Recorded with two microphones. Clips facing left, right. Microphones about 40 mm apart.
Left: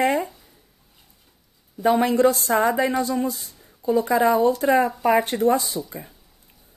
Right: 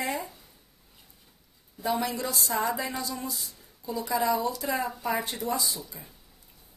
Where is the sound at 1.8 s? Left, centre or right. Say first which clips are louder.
Left 12 dB; left.